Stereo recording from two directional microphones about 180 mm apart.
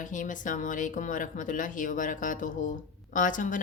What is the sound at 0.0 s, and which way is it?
Speech, 45° left (ahead or behind).